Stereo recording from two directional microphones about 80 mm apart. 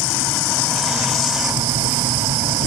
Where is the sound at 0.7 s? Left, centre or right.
Centre.